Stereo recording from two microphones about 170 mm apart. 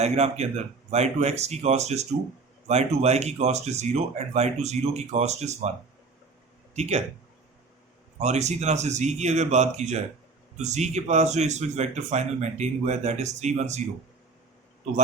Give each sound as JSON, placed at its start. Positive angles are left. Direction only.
{"t": 0.0, "sound": "speech", "side_deg": -40}
{"t": 6.7, "sound": "speech", "side_deg": -40}
{"t": 8.2, "sound": "speech", "side_deg": -40}